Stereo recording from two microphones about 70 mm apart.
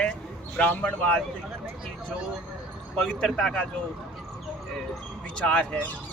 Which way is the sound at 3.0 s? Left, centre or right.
Centre.